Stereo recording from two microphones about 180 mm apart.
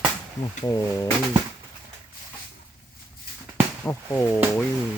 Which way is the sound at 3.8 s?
15° left (ahead or behind).